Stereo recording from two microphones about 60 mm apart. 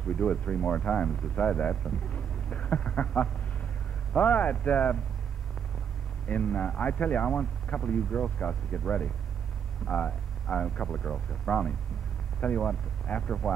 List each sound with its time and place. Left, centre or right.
0.1 s speech: centre
6.2 s speech: left